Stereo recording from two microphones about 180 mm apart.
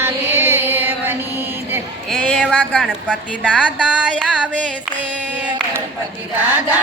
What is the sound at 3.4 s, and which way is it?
Music, 5° left (ahead or behind).